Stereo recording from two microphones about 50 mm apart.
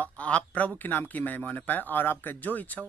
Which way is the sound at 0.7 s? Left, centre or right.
Left.